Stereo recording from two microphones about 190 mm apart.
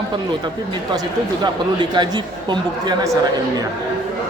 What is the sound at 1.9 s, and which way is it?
A man's voice, 25° right (ahead or behind).